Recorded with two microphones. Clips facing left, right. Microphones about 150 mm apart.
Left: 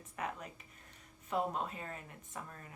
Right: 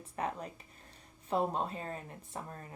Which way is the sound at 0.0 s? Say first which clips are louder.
Right 4 dB; 30° right (ahead or behind).